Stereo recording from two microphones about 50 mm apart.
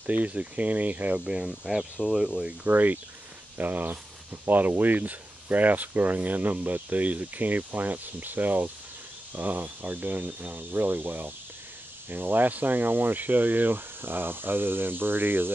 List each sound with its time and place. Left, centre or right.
0.0 s speech: right
1.2 s speech: centre
2.6 s speech: right